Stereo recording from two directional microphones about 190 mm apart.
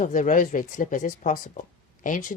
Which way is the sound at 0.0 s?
40° left (ahead or behind).